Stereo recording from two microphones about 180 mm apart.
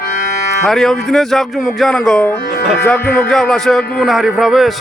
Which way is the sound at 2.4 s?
70° left (ahead or behind).